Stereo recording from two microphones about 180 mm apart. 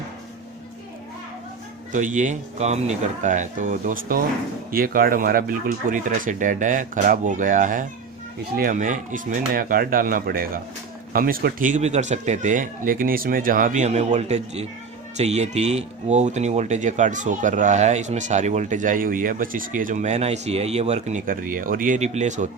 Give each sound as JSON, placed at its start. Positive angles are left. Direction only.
{"t": 1.9, "sound": "speech", "side_deg": -45}